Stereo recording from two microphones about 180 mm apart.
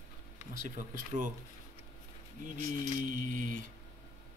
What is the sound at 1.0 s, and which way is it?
Mantra, 45° right (ahead or behind).